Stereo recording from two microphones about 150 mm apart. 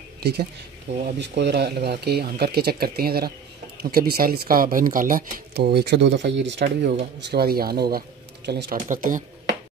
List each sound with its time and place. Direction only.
0.2 s speech: 90° right
8.6 s speech: 60° right (ahead or behind)